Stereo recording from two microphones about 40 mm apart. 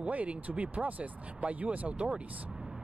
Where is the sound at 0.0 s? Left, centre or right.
Right.